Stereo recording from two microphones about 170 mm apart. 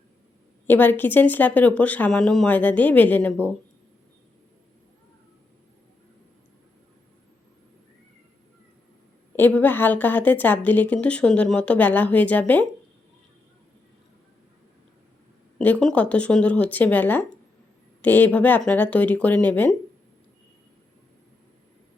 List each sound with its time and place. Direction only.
0.7 s a woman's voice: 10° left (ahead or behind)
9.3 s a woman's voice: 10° left (ahead or behind)
15.5 s a woman's voice: 5° left (ahead or behind)